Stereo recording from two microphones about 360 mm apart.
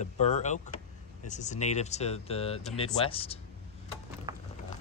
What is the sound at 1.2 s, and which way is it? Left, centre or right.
Speech, centre.